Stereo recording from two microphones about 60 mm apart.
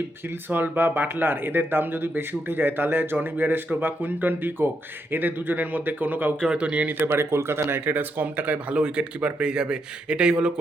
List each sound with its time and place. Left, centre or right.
0.5 s speech: right
6.5 s speech: centre
7.0 s speech: right; by 10.5 s centre